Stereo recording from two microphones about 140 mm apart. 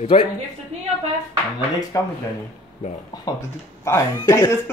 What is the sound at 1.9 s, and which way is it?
Speech, 25° left (ahead or behind).